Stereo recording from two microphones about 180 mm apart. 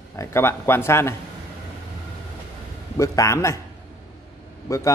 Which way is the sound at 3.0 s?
15° left (ahead or behind).